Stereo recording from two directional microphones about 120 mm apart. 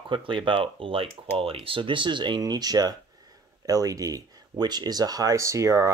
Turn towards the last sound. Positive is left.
turn(degrees=-25)  # may be behind; listen again after turning